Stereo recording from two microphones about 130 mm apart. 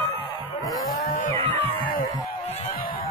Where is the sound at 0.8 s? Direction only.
90° left.